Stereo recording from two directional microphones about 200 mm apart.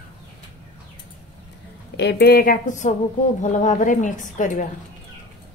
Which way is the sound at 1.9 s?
55° left (ahead or behind).